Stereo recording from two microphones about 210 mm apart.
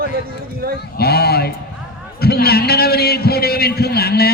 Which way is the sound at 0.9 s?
50° left (ahead or behind).